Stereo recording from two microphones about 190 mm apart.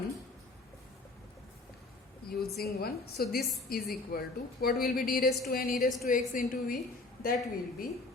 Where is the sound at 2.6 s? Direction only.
55° left (ahead or behind).